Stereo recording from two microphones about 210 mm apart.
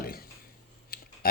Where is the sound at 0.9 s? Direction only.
45° left (ahead or behind).